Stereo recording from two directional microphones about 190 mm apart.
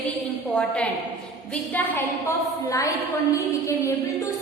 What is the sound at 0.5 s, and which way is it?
A woman's voice, 5° left (ahead or behind).